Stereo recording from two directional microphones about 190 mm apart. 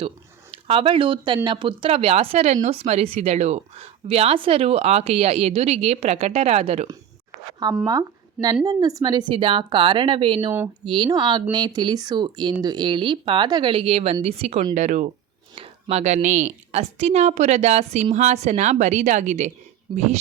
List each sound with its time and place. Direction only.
0.5 s a woman's voice: 25° right (ahead or behind)
7.9 s a woman's voice: 20° right (ahead or behind); by 19.5 s 35° right (ahead or behind)
19.9 s a woman's voice: 25° right (ahead or behind)